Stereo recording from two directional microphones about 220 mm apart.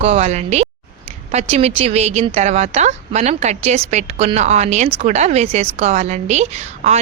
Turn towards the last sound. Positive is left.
turn(degrees=-30)  # may be behind; listen again after turning